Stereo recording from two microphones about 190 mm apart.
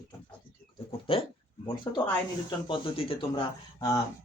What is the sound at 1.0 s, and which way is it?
Speech, 30° left (ahead or behind).